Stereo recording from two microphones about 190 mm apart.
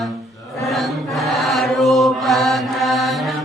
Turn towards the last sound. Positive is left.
turn(degrees=0)  # may be behind; listen again after turning